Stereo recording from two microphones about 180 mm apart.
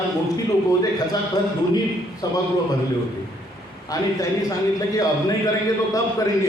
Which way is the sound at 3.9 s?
20° left (ahead or behind).